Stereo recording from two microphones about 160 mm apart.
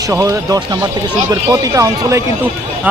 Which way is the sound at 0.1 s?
20° right (ahead or behind).